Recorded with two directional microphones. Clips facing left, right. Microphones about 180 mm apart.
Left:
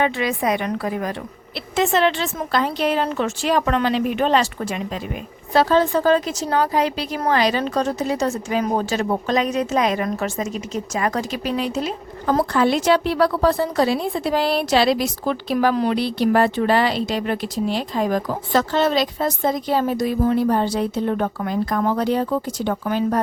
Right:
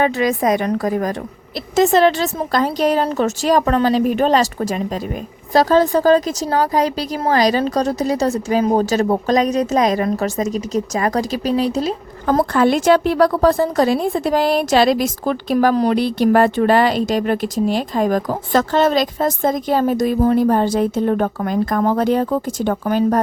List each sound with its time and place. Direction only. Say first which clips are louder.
0.0 s a woman's voice: right 4 dB; 40° right (ahead or behind)